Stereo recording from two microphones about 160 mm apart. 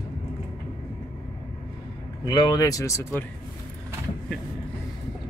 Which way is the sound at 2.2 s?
25° left (ahead or behind).